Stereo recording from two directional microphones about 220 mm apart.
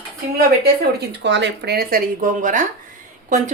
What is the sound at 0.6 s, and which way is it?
Speech, 45° right (ahead or behind).